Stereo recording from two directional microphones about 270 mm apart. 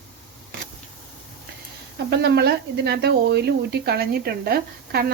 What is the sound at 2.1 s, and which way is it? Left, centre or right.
Speech, right.